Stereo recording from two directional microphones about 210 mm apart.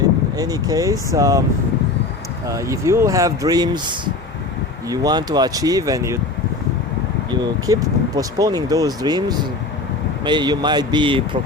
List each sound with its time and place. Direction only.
0.3 s speech: 15° right (ahead or behind)
2.5 s speech: 15° right (ahead or behind)
7.3 s speech: 20° right (ahead or behind)